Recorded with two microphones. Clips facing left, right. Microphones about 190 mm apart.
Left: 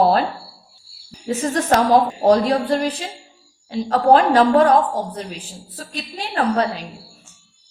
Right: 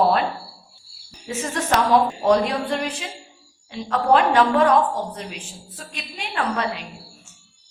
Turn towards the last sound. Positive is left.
turn(degrees=35)  # may be behind; listen again after turning